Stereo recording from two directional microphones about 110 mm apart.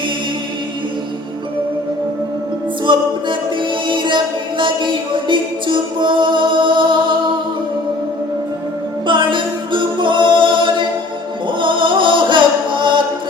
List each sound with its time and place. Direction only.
2.8 s music: 45° right (ahead or behind)
9.0 s music: 45° right (ahead or behind)